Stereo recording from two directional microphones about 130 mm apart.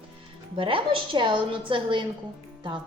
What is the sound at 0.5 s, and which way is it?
A woman's voice, 40° right (ahead or behind).